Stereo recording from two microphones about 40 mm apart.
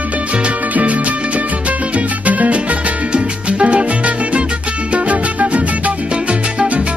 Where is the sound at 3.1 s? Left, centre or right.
Right.